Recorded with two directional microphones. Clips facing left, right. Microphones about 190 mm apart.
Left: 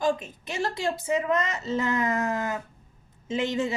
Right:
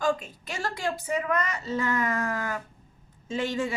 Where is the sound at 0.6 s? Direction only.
25° left (ahead or behind).